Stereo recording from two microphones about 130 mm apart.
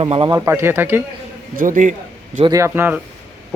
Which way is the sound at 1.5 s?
90° right.